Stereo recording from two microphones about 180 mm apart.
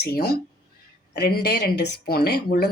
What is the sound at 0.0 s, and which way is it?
Speech, 60° left (ahead or behind).